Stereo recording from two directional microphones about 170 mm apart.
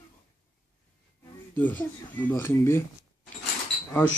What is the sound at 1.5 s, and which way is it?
Speech, 10° left (ahead or behind).